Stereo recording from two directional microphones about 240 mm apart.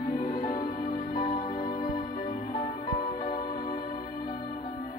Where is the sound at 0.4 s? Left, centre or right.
Left.